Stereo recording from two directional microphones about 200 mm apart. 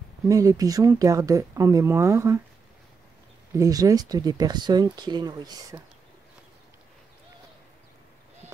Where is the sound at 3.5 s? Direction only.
15° right (ahead or behind).